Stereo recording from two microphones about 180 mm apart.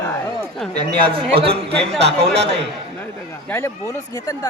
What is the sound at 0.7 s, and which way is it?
Speech, 25° right (ahead or behind).